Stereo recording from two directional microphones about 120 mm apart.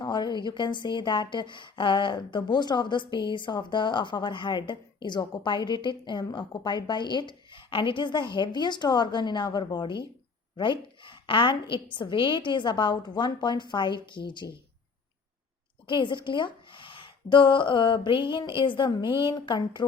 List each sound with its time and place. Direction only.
0.0 s a woman's voice: 35° left (ahead or behind)
15.9 s a woman's voice: 40° left (ahead or behind)